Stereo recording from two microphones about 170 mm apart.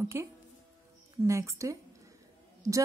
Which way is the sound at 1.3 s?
15° right (ahead or behind).